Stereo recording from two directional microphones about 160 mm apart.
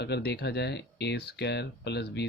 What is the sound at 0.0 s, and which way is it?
Speech, 90° left.